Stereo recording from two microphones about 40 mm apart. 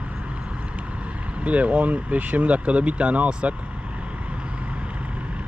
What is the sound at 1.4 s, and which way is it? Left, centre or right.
Speech, right.